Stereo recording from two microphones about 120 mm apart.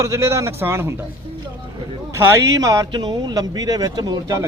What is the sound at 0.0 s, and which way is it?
Speech, 25° right (ahead or behind).